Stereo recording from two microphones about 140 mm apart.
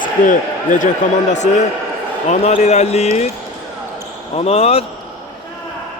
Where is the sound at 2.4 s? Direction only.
55° left (ahead or behind).